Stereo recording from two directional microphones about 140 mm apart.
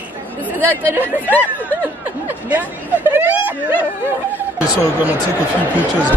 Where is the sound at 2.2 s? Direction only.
15° right (ahead or behind).